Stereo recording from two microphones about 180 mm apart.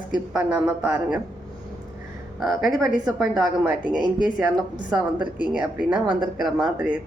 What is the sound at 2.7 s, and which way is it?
Speech, 20° right (ahead or behind).